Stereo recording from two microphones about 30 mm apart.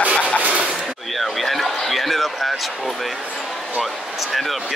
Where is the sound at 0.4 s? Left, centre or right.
Right.